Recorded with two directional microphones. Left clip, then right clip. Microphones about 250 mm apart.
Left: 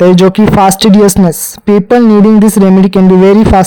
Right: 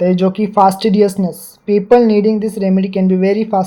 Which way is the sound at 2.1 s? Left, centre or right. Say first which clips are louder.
Left 7 dB; left.